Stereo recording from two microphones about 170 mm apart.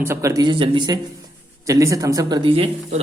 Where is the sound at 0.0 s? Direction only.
15° right (ahead or behind).